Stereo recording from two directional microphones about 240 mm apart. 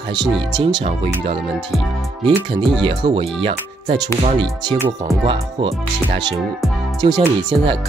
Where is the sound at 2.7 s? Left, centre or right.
Centre.